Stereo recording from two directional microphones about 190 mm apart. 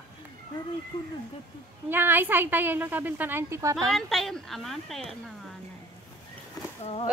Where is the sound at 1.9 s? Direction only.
10° right (ahead or behind).